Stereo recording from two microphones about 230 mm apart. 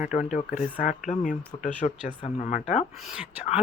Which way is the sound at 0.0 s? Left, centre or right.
Left.